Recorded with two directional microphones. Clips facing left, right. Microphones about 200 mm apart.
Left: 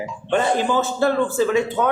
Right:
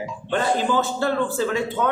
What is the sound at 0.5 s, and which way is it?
Speech, 15° left (ahead or behind).